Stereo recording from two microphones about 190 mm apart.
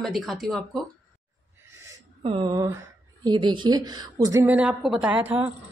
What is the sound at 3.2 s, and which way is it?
A woman's voice, 25° right (ahead or behind).